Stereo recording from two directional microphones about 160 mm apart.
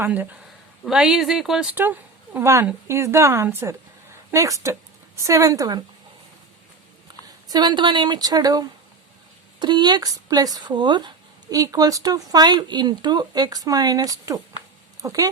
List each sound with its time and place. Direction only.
0.0 s a woman's voice: 10° right (ahead or behind)
7.5 s speech: 30° right (ahead or behind)